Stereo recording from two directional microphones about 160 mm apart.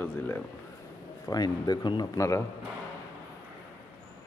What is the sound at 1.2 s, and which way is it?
A man's voice, 25° left (ahead or behind).